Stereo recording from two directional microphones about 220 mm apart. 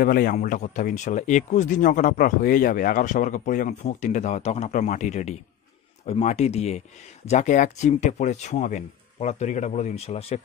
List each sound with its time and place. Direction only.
0.0 s speech: 40° left (ahead or behind)